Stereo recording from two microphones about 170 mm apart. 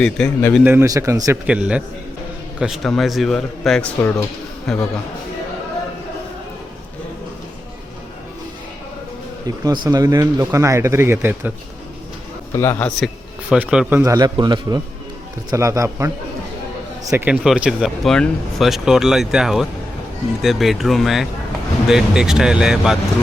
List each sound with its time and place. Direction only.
0.0 s speech: 5° left (ahead or behind)
0.6 s speech: 15° right (ahead or behind)
1.5 s speech: 5° right (ahead or behind)
9.6 s speech: 25° right (ahead or behind)
12.5 s a man's voice: 15° left (ahead or behind)
13.5 s speech: 5° right (ahead or behind)
14.0 s speech: 20° right (ahead or behind); by 23.0 s 5° right (ahead or behind)